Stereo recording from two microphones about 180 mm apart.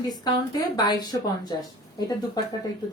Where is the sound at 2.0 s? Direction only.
20° left (ahead or behind).